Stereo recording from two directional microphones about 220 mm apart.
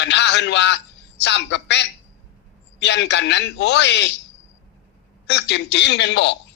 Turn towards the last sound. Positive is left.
turn(degrees=50)  # may be behind; listen again after turning